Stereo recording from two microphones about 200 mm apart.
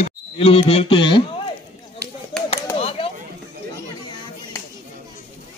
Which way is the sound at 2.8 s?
30° left (ahead or behind).